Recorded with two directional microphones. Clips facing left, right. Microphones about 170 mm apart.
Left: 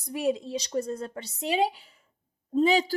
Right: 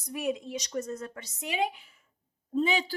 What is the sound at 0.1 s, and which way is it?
A woman's voice, 30° left (ahead or behind).